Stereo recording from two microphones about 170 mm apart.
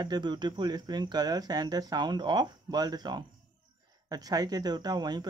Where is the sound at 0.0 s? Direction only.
25° right (ahead or behind).